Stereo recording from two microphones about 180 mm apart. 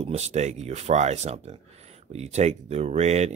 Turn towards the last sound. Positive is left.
turn(degrees=-40)  # may be behind; listen again after turning